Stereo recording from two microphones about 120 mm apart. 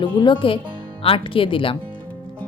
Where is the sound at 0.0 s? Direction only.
40° left (ahead or behind).